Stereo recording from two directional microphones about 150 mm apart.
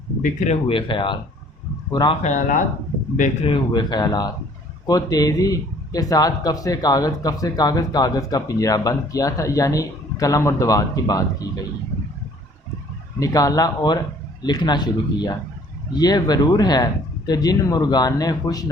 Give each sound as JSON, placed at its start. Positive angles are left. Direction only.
{"t": 0.2, "sound": "speech", "side_deg": 50}
{"t": 0.7, "sound": "speech", "side_deg": 35}
{"t": 2.2, "sound": "speech", "side_deg": 55}
{"t": 3.4, "sound": "a man's voice", "side_deg": 30}
{"t": 13.1, "sound": "a man's voice", "side_deg": 25}